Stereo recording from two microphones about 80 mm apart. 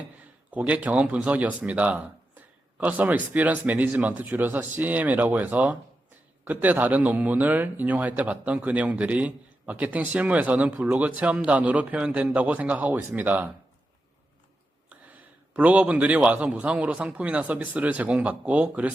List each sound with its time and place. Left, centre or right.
0.5 s a man's voice: centre
15.5 s speech: centre